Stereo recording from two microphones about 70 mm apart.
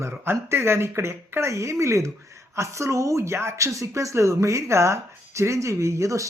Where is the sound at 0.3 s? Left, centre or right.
Right.